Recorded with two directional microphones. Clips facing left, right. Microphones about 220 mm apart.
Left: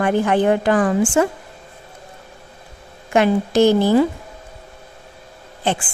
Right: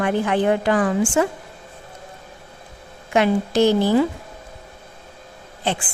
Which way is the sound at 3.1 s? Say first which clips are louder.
Left 2 dB; 50° left (ahead or behind).